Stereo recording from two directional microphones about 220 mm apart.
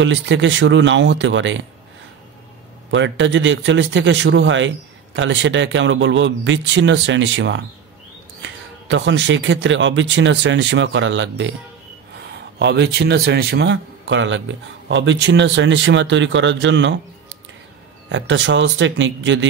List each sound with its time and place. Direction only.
0.0 s a man's voice: 55° right (ahead or behind)
2.9 s a man's voice: 55° right (ahead or behind)
12.5 s a man's voice: 50° right (ahead or behind)
18.1 s a man's voice: 55° right (ahead or behind)